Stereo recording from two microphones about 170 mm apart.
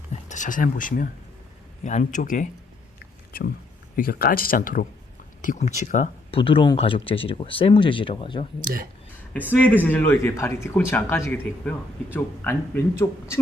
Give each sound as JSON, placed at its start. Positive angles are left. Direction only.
{"t": 0.1, "sound": "speech", "side_deg": 45}
{"t": 3.9, "sound": "speech", "side_deg": 60}
{"t": 6.3, "sound": "speech", "side_deg": 30}
{"t": 8.6, "sound": "speech", "side_deg": -55}
{"t": 9.8, "sound": "speech", "side_deg": 10}